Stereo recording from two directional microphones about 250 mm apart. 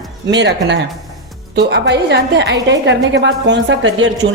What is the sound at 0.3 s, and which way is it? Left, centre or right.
A woman's voice, right.